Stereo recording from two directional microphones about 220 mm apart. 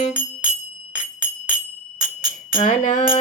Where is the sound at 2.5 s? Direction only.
35° left (ahead or behind).